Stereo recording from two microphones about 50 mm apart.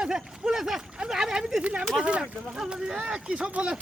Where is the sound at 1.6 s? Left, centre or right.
Right.